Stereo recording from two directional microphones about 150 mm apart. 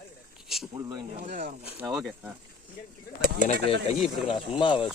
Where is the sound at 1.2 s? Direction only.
65° right (ahead or behind).